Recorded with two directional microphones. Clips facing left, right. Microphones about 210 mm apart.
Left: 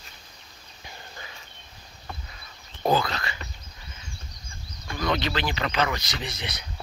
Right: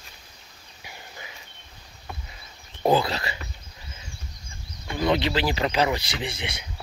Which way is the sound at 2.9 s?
35° right (ahead or behind).